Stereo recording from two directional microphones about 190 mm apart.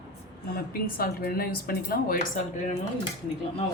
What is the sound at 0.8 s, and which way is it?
A woman's voice, 50° left (ahead or behind).